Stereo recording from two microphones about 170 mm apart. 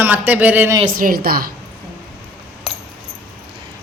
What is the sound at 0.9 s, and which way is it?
Speech, 55° right (ahead or behind).